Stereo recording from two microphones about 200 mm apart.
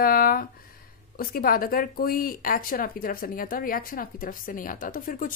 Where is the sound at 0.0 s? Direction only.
45° left (ahead or behind).